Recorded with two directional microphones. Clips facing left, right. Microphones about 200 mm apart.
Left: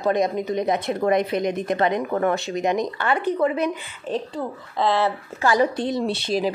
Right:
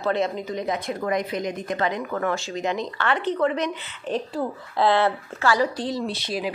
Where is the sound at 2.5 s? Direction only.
15° left (ahead or behind).